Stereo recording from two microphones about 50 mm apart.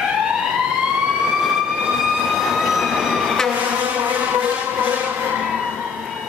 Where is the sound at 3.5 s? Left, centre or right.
Right.